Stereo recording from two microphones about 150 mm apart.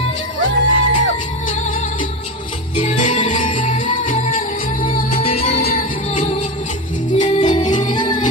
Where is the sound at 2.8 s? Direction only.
55° left (ahead or behind).